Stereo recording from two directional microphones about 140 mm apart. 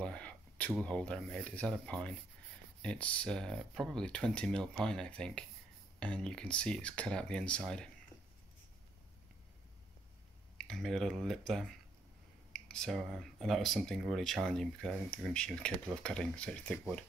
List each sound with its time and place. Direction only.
0.0 s a sound: 10° left (ahead or behind)
0.8 s speech: 10° left (ahead or behind)
10.6 s speech: centre (ahead or behind)